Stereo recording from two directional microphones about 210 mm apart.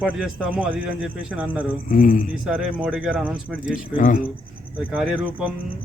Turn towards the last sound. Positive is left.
turn(degrees=-5)  # may be behind; listen again after turning